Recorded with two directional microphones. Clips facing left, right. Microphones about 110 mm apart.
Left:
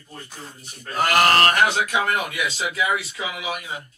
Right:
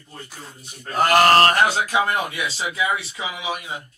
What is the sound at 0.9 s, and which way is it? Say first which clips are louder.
Speech: right 3 dB; 40° right (ahead or behind).